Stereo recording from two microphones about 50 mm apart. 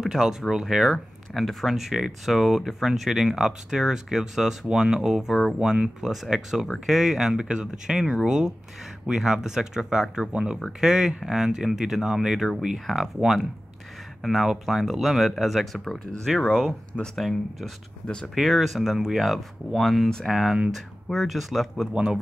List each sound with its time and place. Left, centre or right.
0.0 s speech: centre
1.3 s speech: centre
21.9 s speech: centre